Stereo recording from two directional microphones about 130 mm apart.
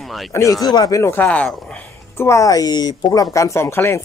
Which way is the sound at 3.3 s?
20° left (ahead or behind).